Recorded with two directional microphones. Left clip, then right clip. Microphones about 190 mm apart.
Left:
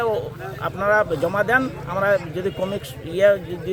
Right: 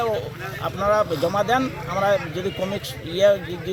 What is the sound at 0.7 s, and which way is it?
Speech, 10° left (ahead or behind).